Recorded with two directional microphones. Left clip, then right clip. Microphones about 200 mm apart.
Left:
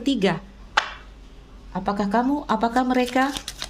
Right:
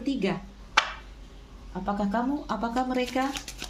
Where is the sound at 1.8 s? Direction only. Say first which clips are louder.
Left 6 dB; 55° left (ahead or behind).